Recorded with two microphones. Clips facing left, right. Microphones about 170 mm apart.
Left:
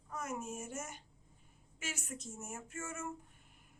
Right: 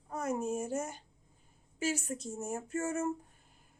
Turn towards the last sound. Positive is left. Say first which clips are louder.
# right 10 dB
turn(degrees=-40)  # may be behind; listen again after turning